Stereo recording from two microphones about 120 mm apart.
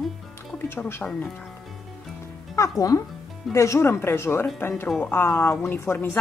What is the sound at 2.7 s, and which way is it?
A woman's voice, 30° left (ahead or behind).